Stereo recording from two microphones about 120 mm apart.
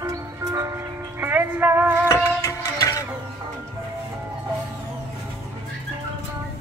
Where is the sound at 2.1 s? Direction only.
25° left (ahead or behind).